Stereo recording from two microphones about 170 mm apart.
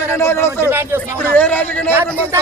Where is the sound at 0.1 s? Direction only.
15° left (ahead or behind).